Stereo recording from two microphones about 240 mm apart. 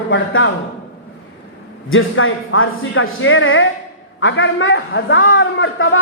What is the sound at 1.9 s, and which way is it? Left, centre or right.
A man's voice, left.